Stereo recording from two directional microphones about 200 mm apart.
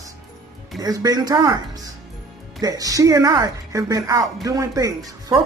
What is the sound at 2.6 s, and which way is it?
A woman's voice, 20° right (ahead or behind).